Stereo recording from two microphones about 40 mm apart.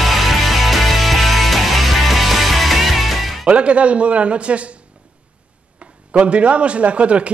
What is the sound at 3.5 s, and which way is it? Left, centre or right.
A man's voice, right.